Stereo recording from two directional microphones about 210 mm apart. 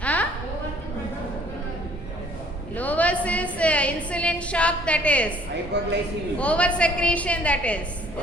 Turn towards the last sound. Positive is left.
turn(degrees=5)  # may be behind; listen again after turning